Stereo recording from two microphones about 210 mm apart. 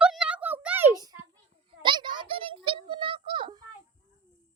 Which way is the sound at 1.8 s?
20° right (ahead or behind).